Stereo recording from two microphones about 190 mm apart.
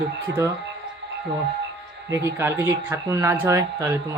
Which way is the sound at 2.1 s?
15° right (ahead or behind).